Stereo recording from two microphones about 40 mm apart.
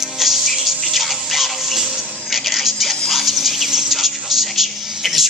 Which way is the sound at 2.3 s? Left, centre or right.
Centre.